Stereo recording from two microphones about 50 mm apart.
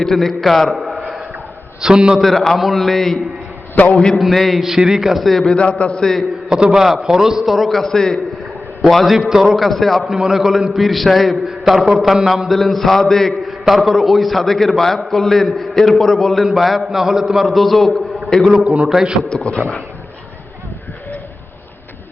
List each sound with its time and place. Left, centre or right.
0.0 s a man's voice: centre
0.8 s a sound: centre
1.8 s a man's voice: centre
2.1 s a man's voice: centre
3.8 s a man's voice: left
4.2 s a man's voice: centre
5.5 s a man's voice: left
6.0 s a man's voice: centre
6.7 s a man's voice: centre
8.9 s a man's voice: centre
9.6 s a man's voice: centre
10.2 s a man's voice: centre
18.6 s a man's voice: right
19.3 s a man's voice: centre